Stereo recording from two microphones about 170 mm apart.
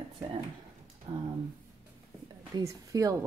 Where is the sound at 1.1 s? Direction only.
40° right (ahead or behind).